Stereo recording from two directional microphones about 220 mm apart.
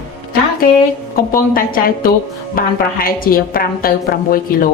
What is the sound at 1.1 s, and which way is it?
A woman's voice, 40° left (ahead or behind).